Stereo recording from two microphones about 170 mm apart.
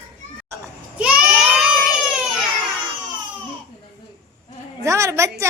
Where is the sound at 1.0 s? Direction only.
5° right (ahead or behind).